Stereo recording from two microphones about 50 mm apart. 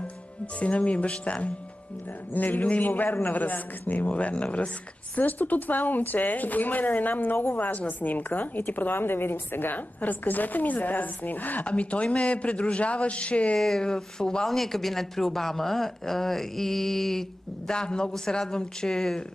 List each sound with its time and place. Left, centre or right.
0.6 s speech: left
2.3 s a woman's voice: left
4.1 s speech: left
5.1 s a woman's voice: left
13.6 s speech: centre